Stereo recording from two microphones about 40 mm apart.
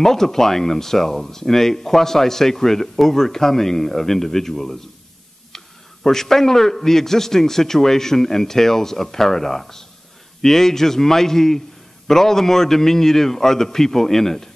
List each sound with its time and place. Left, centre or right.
0.0 s speech: centre
6.0 s speech: centre